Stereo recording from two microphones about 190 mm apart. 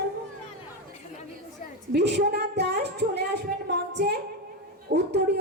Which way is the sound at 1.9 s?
60° right (ahead or behind).